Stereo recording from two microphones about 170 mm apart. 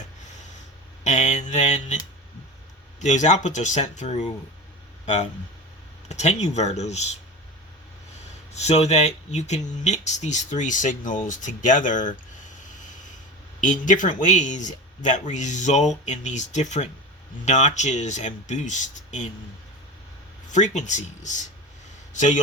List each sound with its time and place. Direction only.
1.0 s mantra: 45° left (ahead or behind)
3.0 s speech: 45° left (ahead or behind)
6.1 s speech: 40° left (ahead or behind)
8.5 s speech: 40° left (ahead or behind)
13.6 s speech: 50° left (ahead or behind)
20.5 s a man's voice: 45° left (ahead or behind)